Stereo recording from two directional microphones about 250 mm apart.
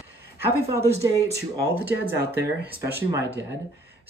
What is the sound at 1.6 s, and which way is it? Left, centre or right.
Speech, centre.